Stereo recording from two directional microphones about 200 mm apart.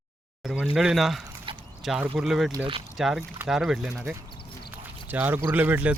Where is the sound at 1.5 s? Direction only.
25° right (ahead or behind).